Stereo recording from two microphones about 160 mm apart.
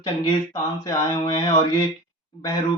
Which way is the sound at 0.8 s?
25° left (ahead or behind).